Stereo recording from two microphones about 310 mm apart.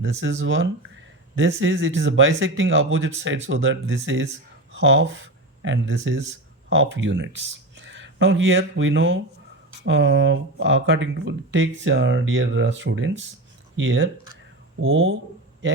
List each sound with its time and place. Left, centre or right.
0.0 s speech: right